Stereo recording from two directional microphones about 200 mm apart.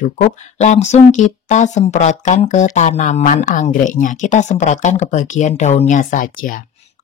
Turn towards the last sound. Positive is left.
turn(degrees=40)  # may be behind; listen again after turning